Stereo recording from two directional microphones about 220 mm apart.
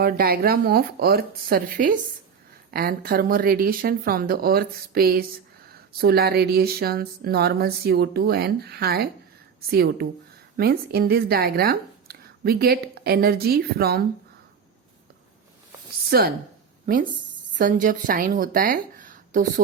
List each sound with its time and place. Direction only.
0.0 s a woman's voice: 45° right (ahead or behind)
16.0 s a woman's voice: 45° right (ahead or behind)